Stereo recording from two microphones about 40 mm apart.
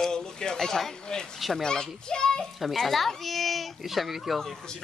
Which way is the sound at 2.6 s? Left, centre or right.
Centre.